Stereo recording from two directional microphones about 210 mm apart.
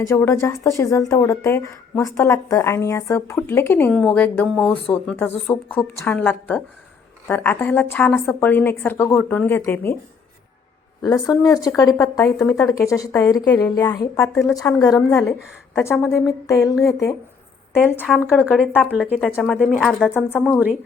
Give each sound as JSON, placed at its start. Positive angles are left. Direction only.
{"t": 0.1, "sound": "speech", "side_deg": 10}
{"t": 11.0, "sound": "speech", "side_deg": 20}
{"t": 18.0, "sound": "speech", "side_deg": -5}
{"t": 20.1, "sound": "speech", "side_deg": 10}